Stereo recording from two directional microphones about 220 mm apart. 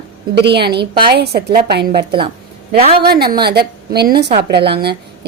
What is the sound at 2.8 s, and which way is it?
Speech, 25° right (ahead or behind).